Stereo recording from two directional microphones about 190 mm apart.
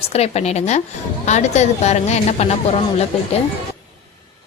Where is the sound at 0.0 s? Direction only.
35° left (ahead or behind).